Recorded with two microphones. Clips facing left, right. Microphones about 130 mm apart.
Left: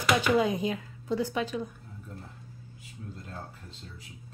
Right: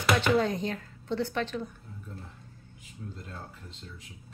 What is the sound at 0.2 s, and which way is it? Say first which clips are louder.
Speech: left 1 dB; 10° left (ahead or behind).